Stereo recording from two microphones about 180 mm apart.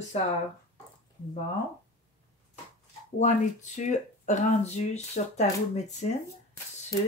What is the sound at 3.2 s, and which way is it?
Speech, 40° left (ahead or behind).